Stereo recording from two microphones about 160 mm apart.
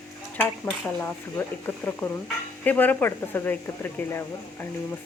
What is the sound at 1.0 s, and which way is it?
Speech, 15° left (ahead or behind).